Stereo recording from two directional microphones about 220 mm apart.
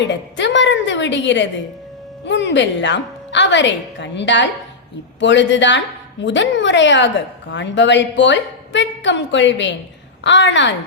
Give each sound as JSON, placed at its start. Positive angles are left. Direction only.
{"t": 0.1, "sound": "a woman's voice", "side_deg": 55}